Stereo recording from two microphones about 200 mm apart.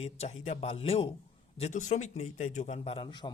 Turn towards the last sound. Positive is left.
turn(degrees=25)  # may be behind; listen again after turning